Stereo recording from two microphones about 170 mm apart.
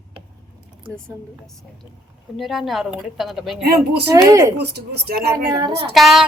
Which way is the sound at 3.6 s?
70° right (ahead or behind).